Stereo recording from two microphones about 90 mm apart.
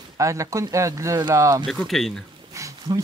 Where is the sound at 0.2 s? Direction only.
35° right (ahead or behind).